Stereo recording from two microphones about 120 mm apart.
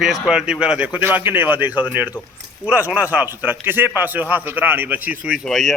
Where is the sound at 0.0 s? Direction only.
5° right (ahead or behind).